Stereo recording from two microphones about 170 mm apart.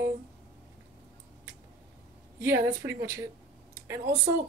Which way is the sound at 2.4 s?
15° right (ahead or behind).